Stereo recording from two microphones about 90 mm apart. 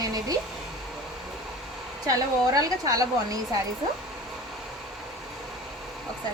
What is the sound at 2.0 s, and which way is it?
Speech, 40° right (ahead or behind).